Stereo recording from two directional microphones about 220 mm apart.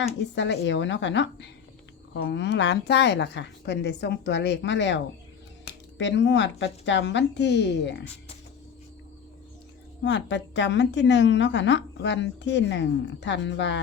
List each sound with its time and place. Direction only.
0.3 s a woman's voice: 55° left (ahead or behind)
10.0 s a woman's voice: 55° left (ahead or behind)